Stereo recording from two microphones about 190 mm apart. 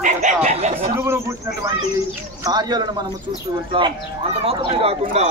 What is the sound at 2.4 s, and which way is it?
Speech, 20° right (ahead or behind).